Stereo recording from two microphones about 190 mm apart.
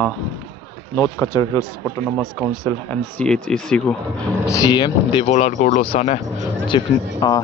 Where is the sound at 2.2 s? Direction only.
Centre (ahead or behind).